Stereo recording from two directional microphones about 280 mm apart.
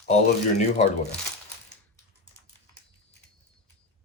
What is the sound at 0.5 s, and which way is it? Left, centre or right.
Speech, left.